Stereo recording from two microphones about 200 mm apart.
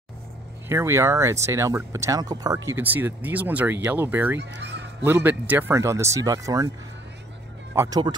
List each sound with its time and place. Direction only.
0.7 s speech: 15° right (ahead or behind)
4.4 s fowl: 60° right (ahead or behind)
5.0 s speech: 10° right (ahead or behind)
7.7 s speech: 15° right (ahead or behind)